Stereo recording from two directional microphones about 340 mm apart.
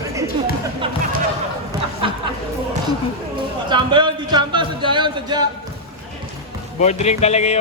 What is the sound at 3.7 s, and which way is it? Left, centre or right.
Speech, centre.